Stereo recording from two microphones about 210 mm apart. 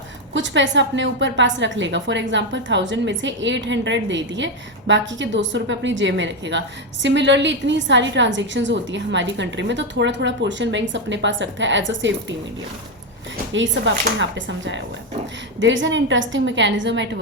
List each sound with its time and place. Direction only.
0.3 s a woman's voice: 60° right (ahead or behind)
13.5 s a woman's voice: 60° right (ahead or behind)